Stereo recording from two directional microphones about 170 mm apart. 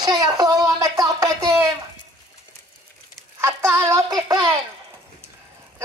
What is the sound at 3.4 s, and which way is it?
Child singing, 15° right (ahead or behind).